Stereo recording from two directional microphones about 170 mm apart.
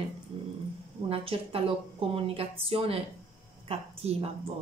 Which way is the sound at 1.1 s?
35° right (ahead or behind).